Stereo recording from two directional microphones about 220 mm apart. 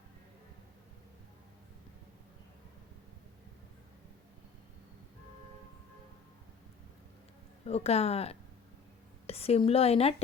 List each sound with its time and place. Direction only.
7.7 s speech: 30° left (ahead or behind)